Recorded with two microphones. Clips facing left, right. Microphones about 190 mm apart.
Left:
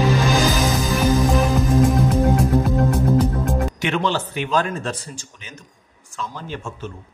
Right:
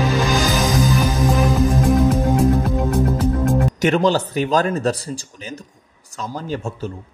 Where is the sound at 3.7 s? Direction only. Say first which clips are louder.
Right 5 dB; 40° right (ahead or behind).